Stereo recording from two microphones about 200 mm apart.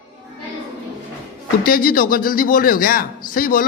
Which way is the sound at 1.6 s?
45° left (ahead or behind).